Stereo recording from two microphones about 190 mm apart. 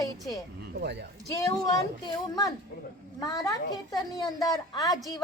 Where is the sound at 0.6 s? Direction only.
60° right (ahead or behind).